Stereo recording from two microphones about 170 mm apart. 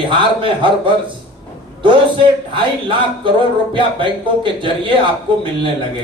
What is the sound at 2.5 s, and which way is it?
A man's voice, 30° right (ahead or behind).